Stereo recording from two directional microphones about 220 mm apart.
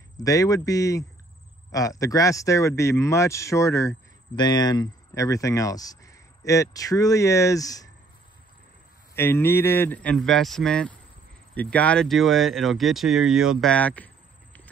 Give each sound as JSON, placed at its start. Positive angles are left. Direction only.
{"t": 0.2, "sound": "speech", "side_deg": 15}
{"t": 9.1, "sound": "speech", "side_deg": 10}